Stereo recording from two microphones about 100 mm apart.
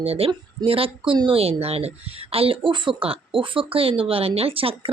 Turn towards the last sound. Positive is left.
turn(degrees=-65)  # may be behind; listen again after turning